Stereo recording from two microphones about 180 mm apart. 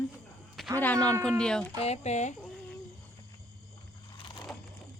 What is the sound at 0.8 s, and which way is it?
Speech, 10° left (ahead or behind).